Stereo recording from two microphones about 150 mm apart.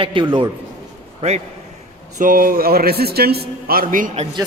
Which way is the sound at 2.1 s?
65° right (ahead or behind).